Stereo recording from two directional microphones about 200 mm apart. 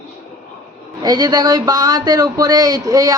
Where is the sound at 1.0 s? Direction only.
20° right (ahead or behind).